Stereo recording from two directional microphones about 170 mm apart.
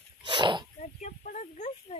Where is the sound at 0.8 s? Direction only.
45° left (ahead or behind).